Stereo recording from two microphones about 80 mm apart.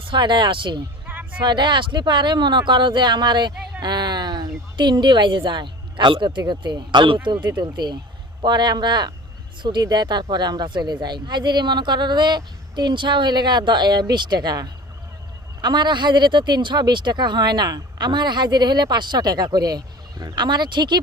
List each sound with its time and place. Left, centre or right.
0.1 s speech: right
1.0 s a sound: right
1.4 s speech: right
6.5 s speech: right
7.6 s speech: right
15.6 s speech: right